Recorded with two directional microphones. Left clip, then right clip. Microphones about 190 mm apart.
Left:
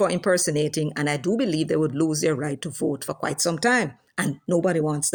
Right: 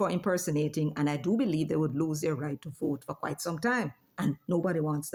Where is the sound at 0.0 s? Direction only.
25° left (ahead or behind).